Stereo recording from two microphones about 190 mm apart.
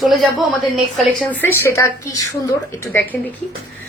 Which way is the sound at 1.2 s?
10° left (ahead or behind).